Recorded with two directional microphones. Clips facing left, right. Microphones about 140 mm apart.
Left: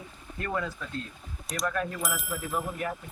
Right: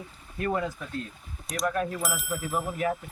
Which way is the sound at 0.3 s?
15° right (ahead or behind).